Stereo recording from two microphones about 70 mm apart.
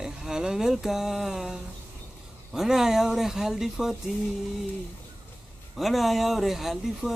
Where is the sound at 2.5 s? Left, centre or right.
Centre.